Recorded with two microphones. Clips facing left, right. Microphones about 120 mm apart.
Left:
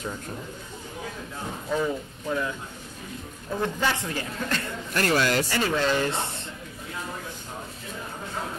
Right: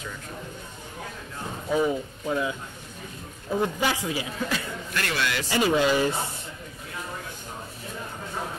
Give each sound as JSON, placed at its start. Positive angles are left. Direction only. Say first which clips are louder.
{"t": 1.7, "sound": "a man's voice", "louder": "right 3 dB", "side_deg": -10}
{"t": 3.6, "sound": "a man's voice", "louder": "left 1 dB", "side_deg": -10}
{"t": 4.9, "sound": "a man's voice", "louder": "left 6 dB", "side_deg": 40}
{"t": 5.5, "sound": "a man's voice", "louder": "right 3 dB", "side_deg": -15}